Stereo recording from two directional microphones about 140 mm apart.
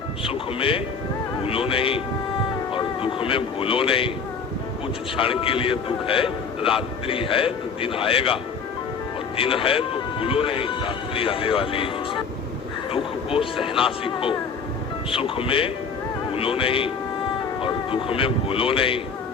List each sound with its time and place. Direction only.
0.3 s a man's voice: 40° left (ahead or behind)
5.1 s a man's voice: 40° left (ahead or behind)
9.4 s a man's voice: 40° left (ahead or behind)